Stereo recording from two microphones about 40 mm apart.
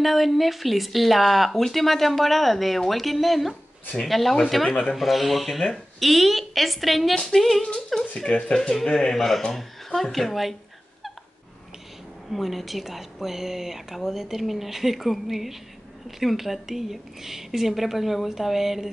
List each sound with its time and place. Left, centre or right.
0.0 s speech: centre
4.6 s speech: left
4.9 s speech: centre
7.7 s speech: left
8.3 s speech: left; by 10.5 s centre
12.3 s a woman's voice: centre